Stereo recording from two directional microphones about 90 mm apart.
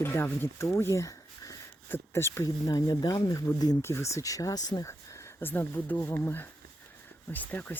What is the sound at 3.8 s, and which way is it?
Speech, 30° left (ahead or behind).